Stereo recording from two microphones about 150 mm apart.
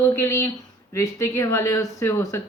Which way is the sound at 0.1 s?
20° left (ahead or behind).